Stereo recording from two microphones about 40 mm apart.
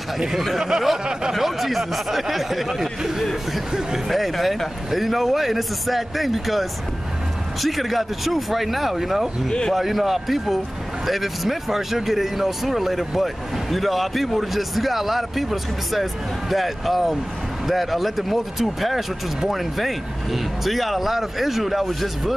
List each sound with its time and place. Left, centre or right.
0.3 s speech: centre
0.7 s a sound: centre
1.3 s speech: centre
3.0 s a sound: centre
4.1 s speech: centre
9.5 s a man's voice: centre
9.8 s speech: centre